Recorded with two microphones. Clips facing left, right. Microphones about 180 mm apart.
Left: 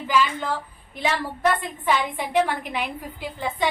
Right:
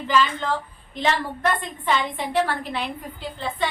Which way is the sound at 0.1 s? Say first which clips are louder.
Right 1 dB; 10° left (ahead or behind).